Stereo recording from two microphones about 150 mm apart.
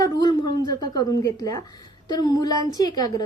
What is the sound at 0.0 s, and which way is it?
A woman's voice, 25° left (ahead or behind).